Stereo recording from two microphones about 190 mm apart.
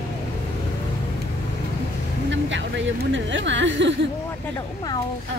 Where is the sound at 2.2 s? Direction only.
70° right (ahead or behind).